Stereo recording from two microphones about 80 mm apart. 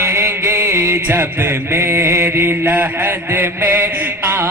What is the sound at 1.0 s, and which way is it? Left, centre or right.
Mantra, right.